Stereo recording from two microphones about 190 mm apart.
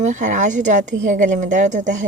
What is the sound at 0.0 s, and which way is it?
Speech, 40° right (ahead or behind).